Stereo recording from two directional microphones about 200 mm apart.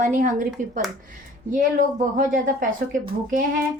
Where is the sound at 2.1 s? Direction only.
40° right (ahead or behind).